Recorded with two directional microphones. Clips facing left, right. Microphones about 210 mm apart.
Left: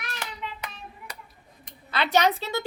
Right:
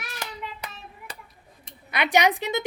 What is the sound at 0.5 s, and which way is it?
Hands, 35° right (ahead or behind).